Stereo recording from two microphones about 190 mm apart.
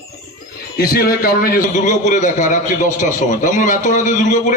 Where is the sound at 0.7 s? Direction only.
55° left (ahead or behind).